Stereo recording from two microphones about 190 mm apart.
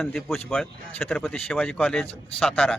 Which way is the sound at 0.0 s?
Centre (ahead or behind).